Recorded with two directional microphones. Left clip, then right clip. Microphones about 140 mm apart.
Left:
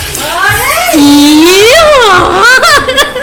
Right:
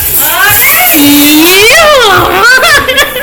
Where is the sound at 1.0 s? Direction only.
15° left (ahead or behind).